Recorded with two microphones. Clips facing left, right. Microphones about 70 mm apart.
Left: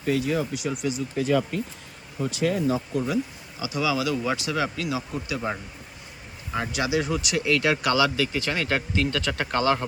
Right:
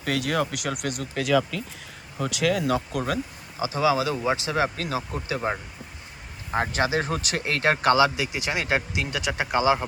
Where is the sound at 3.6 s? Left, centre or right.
Right.